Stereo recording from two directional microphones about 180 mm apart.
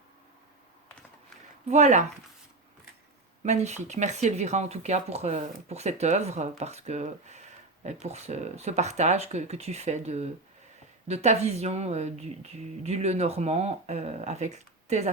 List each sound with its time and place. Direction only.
1.6 s speech: 40° right (ahead or behind)
3.4 s speech: 40° right (ahead or behind)